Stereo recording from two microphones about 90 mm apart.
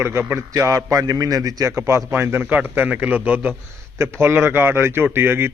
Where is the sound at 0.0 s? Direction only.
25° right (ahead or behind).